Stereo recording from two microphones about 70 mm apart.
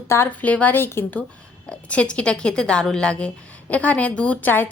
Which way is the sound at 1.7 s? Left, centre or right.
Centre.